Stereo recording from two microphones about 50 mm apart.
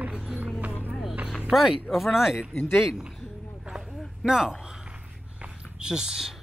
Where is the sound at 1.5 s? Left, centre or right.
Centre.